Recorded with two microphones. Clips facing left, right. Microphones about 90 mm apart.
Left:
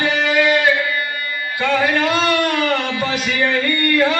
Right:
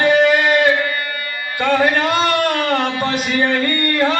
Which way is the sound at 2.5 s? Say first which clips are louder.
Right 1 dB; 45° right (ahead or behind).